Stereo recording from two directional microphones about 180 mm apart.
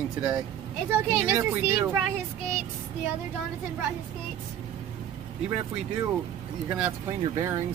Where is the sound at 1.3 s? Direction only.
15° right (ahead or behind).